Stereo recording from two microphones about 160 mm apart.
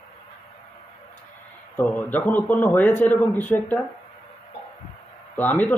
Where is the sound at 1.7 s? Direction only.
10° left (ahead or behind).